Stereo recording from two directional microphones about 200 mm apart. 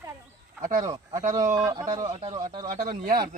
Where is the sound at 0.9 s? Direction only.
20° right (ahead or behind).